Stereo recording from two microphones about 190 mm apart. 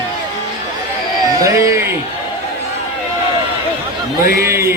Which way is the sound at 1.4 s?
15° right (ahead or behind).